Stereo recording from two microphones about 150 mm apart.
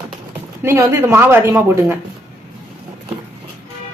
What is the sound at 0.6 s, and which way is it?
Speech, 15° right (ahead or behind).